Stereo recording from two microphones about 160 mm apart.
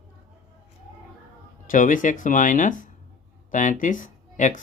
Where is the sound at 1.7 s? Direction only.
55° left (ahead or behind).